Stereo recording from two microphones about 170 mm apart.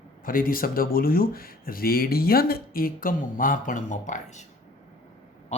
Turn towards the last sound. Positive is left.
turn(degrees=45)  # may be behind; listen again after turning